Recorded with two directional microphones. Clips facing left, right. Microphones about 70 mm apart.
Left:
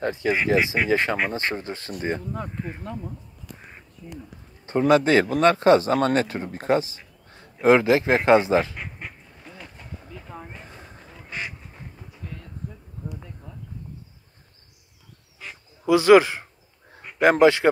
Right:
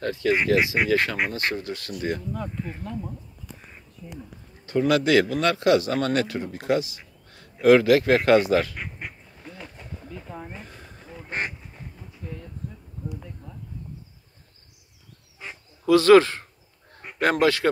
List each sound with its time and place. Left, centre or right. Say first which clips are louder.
0.0 s speech: even; left
4.6 s speech: left 3 dB; left
9.6 s a sound: even; centre
10.6 s a sound: even; left
11.2 s duck: right 3 dB; right
15.8 s speech: even; centre